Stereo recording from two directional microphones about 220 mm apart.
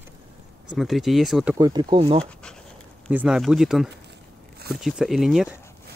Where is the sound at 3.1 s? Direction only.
5° right (ahead or behind).